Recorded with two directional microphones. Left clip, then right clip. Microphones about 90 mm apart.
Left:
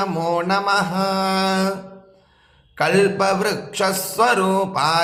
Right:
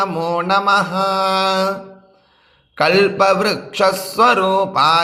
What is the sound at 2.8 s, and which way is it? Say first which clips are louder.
Mantra: right 4 dB; 40° right (ahead or behind).